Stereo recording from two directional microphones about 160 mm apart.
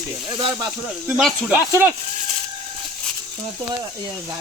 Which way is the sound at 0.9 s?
Centre (ahead or behind).